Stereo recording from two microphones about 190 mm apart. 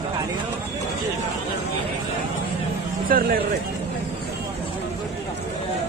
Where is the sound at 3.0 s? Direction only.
50° right (ahead or behind).